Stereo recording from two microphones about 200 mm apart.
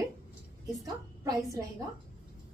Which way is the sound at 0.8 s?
15° right (ahead or behind).